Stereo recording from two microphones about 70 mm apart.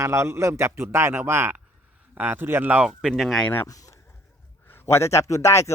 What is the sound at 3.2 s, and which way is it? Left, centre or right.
Speech, centre.